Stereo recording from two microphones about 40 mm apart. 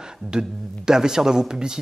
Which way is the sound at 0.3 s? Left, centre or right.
Centre.